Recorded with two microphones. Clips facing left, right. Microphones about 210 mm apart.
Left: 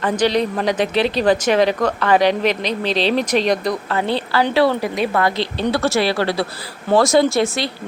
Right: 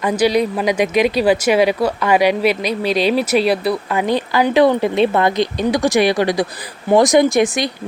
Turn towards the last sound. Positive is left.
turn(degrees=-15)  # may be behind; listen again after turning